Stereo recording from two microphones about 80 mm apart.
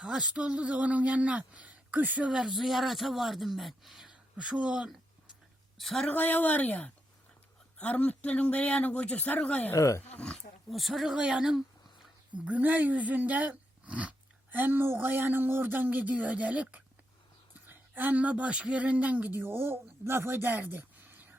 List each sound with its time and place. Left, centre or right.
0.0 s speech: centre
4.1 s speech: centre
5.7 s a woman's voice: centre
6.1 s speech: left
9.7 s speech: left
10.1 s speech: centre
12.5 s speech: centre